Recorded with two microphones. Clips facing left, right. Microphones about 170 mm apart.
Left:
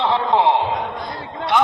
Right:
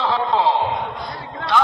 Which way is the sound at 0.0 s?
20° left (ahead or behind).